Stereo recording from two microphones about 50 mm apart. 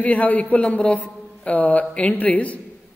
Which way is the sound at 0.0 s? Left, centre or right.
Left.